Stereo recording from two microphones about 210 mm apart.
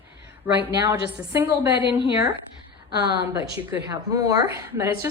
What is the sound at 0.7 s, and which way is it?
A woman's voice, 15° right (ahead or behind).